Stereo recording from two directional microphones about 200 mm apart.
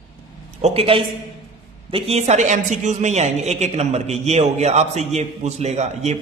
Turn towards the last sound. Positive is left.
turn(degrees=-35)  # may be behind; listen again after turning